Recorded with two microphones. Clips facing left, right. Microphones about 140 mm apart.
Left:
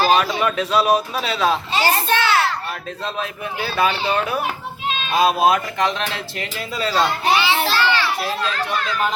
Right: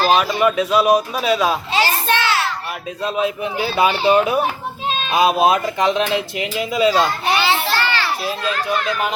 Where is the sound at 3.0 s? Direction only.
15° right (ahead or behind).